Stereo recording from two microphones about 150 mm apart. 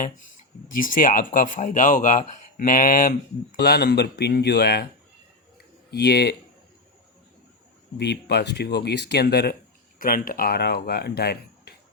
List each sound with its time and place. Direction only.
0.8 s speech: 65° left (ahead or behind)
3.6 s speech: 90° left
5.9 s speech: 90° left
7.9 s speech: 90° left
10.0 s speech: 70° left (ahead or behind); by 11.7 s 90° left